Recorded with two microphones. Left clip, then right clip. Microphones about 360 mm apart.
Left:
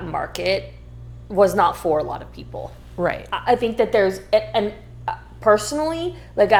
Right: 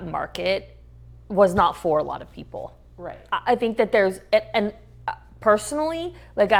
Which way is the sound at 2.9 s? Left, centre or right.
Left.